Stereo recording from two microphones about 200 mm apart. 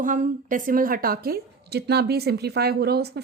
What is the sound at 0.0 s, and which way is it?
A woman's voice, 40° right (ahead or behind).